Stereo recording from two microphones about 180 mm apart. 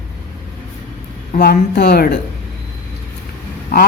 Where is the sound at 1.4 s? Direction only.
60° left (ahead or behind).